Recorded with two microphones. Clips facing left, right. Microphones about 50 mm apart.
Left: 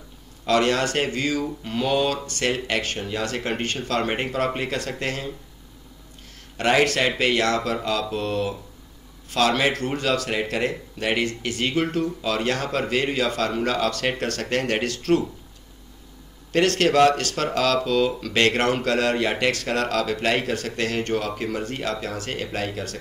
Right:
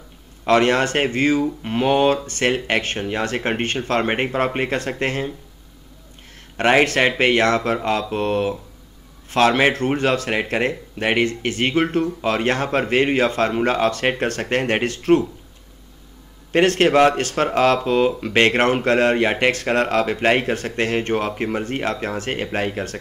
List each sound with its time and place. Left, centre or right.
0.5 s speech: right
6.3 s speech: right
16.5 s speech: right